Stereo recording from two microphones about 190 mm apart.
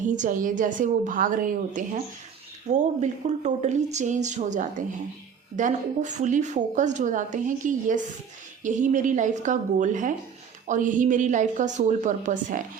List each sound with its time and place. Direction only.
0.0 s a woman's voice: 45° right (ahead or behind)